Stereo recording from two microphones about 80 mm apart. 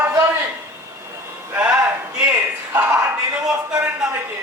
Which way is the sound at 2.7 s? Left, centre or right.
Right.